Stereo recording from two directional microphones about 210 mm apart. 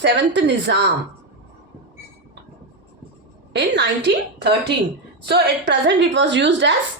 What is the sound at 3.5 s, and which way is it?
A woman's voice, 55° right (ahead or behind).